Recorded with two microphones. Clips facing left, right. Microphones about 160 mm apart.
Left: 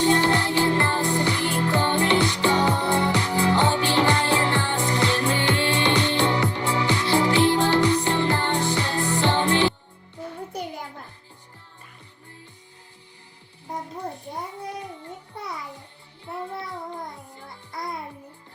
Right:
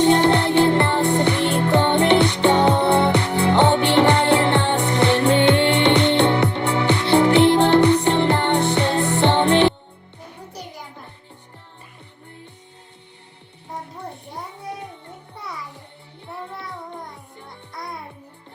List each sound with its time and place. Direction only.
0.0 s music: 65° right (ahead or behind)